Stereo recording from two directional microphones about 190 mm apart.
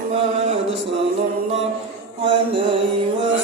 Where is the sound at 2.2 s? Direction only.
25° right (ahead or behind).